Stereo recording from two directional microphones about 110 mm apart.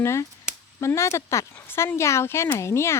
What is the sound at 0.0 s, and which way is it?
Speech, 25° left (ahead or behind).